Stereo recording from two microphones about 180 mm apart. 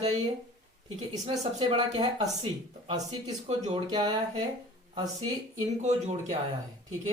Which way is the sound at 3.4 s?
35° right (ahead or behind).